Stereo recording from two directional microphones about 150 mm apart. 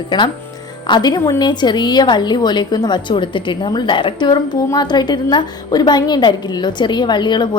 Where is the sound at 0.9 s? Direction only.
30° left (ahead or behind).